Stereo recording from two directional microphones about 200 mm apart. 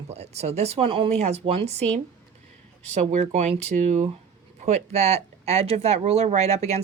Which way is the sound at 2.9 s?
35° right (ahead or behind).